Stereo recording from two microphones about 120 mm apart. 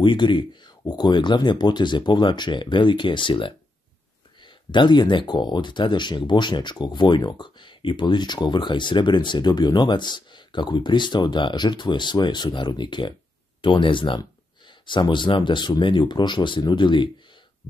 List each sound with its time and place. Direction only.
0.0 s speech: 40° left (ahead or behind)